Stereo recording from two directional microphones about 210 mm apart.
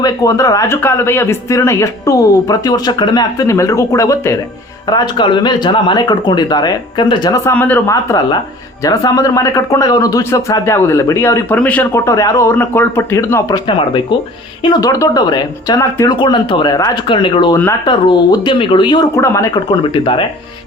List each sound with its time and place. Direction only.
0.0 s speech: 15° left (ahead or behind)